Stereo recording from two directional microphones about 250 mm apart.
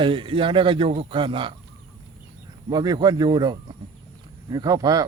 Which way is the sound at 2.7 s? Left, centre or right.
Centre.